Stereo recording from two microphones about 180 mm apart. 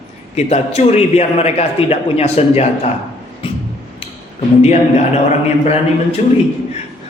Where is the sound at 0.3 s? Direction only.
35° left (ahead or behind).